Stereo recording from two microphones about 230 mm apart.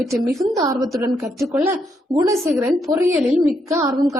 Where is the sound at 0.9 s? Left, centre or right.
Centre.